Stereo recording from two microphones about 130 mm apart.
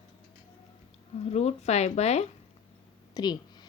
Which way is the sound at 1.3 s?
60° left (ahead or behind).